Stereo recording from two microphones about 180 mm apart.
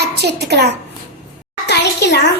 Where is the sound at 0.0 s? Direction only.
65° right (ahead or behind).